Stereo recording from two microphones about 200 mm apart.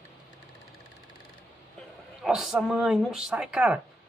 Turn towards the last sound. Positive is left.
turn(degrees=-5)  # may be behind; listen again after turning